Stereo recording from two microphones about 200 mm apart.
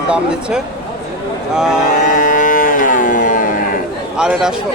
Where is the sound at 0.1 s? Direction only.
5° right (ahead or behind).